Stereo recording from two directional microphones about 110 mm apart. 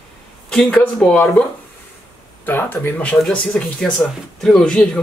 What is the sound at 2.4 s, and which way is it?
Speech, 20° left (ahead or behind).